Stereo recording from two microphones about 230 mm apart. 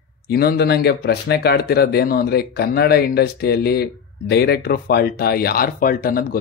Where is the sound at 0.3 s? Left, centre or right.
Left.